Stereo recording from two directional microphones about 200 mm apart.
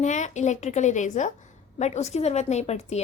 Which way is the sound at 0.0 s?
35° left (ahead or behind).